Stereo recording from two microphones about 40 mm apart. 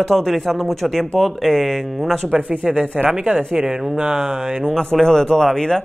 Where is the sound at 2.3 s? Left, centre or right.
Right.